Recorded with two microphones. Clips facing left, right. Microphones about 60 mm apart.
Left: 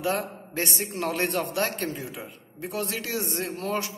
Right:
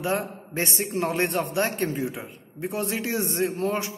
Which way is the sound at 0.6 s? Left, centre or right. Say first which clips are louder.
Right 3 dB; right.